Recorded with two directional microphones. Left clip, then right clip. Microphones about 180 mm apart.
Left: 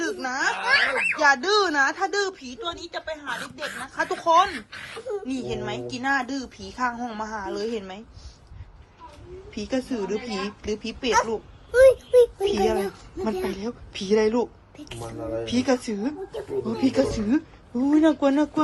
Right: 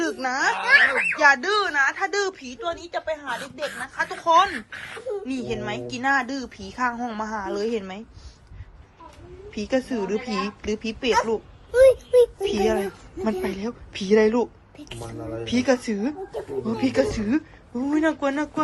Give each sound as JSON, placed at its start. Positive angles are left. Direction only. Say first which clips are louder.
{"t": 0.0, "sound": "a sound", "louder": "right 2 dB", "side_deg": 0}
{"t": 1.1, "sound": "speech", "louder": "right 1 dB", "side_deg": 15}
{"t": 1.6, "sound": "speech", "louder": "even", "side_deg": 35}
{"t": 2.0, "sound": "a woman's voice", "louder": "right 1 dB", "side_deg": 10}
{"t": 3.9, "sound": "speech", "louder": "left 3 dB", "side_deg": 35}
{"t": 4.2, "sound": "speech", "louder": "right 1 dB", "side_deg": 15}
{"t": 4.5, "sound": "a woman's voice", "louder": "right 2 dB", "side_deg": 0}
{"t": 9.5, "sound": "a woman's voice", "louder": "right 3 dB", "side_deg": 5}
{"t": 12.5, "sound": "speech", "louder": "right 2 dB", "side_deg": 10}
{"t": 13.1, "sound": "a woman's voice", "louder": "right 1 dB", "side_deg": 0}
{"t": 16.6, "sound": "speech", "louder": "right 1 dB", "side_deg": 15}